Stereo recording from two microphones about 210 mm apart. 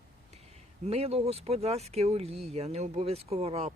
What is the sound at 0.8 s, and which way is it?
Speech, 30° right (ahead or behind).